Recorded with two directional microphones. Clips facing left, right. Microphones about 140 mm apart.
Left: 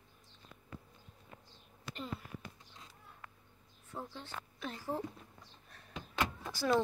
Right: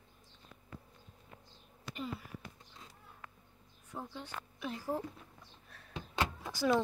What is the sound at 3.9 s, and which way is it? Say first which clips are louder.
A woman's voice: right 1 dB; 15° right (ahead or behind).